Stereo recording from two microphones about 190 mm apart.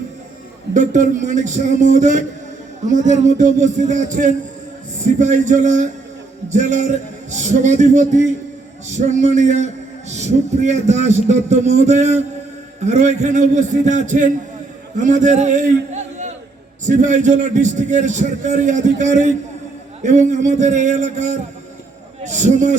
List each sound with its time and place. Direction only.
0.7 s a man's voice: 40° right (ahead or behind)